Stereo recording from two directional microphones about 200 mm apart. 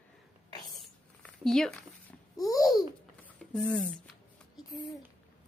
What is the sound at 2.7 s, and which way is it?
Babbling, centre (ahead or behind).